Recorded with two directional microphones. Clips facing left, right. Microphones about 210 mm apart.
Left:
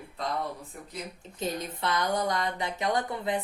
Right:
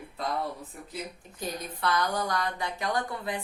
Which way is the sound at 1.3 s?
25° left (ahead or behind).